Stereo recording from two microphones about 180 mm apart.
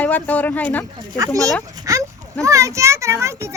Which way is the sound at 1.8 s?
20° right (ahead or behind).